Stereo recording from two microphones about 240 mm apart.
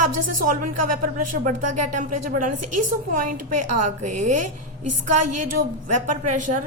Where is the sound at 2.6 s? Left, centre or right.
Right.